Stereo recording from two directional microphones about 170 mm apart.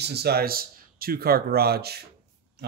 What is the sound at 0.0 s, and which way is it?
Speech, 70° right (ahead or behind).